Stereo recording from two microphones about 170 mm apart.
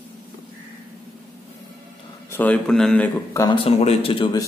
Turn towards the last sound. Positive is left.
turn(degrees=30)  # may be behind; listen again after turning